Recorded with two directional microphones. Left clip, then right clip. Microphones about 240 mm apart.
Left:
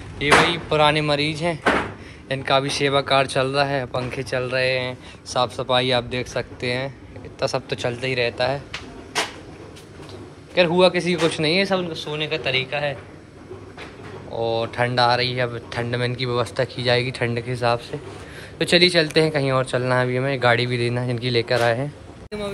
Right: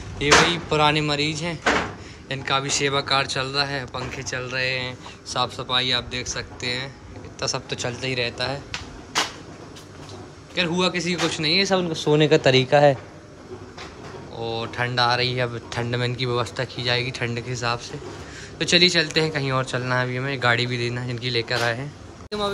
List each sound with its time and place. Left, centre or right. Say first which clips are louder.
0.2 s speech: left 1 dB; centre
10.5 s speech: left 6 dB; centre
11.9 s speech: right 8 dB; right
14.3 s speech: left 6 dB; centre